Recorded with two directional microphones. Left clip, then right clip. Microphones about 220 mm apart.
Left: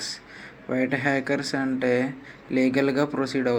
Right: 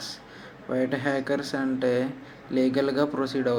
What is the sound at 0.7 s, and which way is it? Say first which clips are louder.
Speech: left 2 dB; 25° left (ahead or behind).